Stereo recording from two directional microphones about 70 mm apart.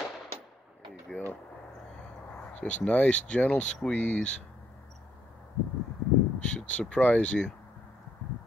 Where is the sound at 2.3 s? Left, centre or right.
Left.